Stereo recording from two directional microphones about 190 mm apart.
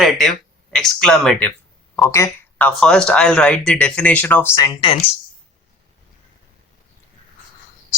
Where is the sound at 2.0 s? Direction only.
15° left (ahead or behind).